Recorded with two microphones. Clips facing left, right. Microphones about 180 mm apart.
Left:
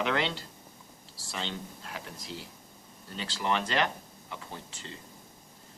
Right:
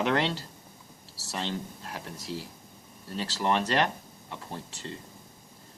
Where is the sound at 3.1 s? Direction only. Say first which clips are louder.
Right 3 dB; 40° right (ahead or behind).